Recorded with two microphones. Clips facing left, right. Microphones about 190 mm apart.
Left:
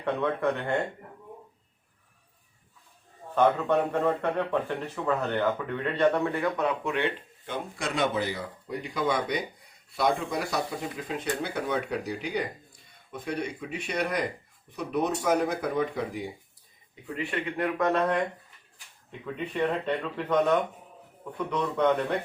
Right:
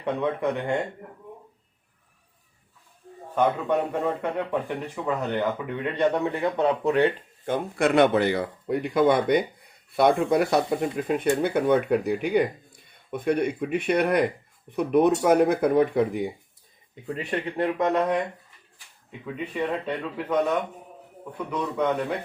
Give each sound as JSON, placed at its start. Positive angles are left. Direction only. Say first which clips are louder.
{"t": 0.0, "sound": "speech", "louder": "right 1 dB", "side_deg": -15}
{"t": 3.3, "sound": "a man's voice", "louder": "even", "side_deg": -10}
{"t": 17.2, "sound": "a man's voice", "louder": "right 3 dB", "side_deg": -35}
{"t": 17.7, "sound": "speech", "louder": "right 1 dB", "side_deg": -20}
{"t": 19.2, "sound": "speech", "louder": "even", "side_deg": -5}